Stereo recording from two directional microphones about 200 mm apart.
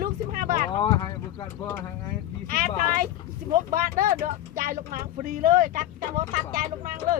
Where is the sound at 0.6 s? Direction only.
25° left (ahead or behind).